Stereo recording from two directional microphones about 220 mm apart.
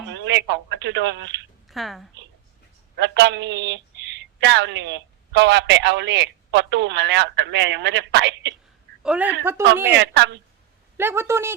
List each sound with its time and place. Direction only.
0.1 s speech: 55° right (ahead or behind)
1.6 s a woman's voice: centre (ahead or behind)
3.0 s a woman's voice: 50° right (ahead or behind)
9.0 s a woman's voice: 5° right (ahead or behind)
9.9 s a woman's voice: 55° right (ahead or behind)
10.9 s a woman's voice: 10° right (ahead or behind)